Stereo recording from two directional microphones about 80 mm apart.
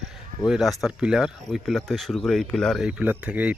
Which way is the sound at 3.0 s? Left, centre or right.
Centre.